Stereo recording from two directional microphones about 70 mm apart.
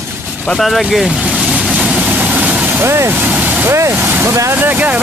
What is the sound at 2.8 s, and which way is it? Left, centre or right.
Vehicle, right.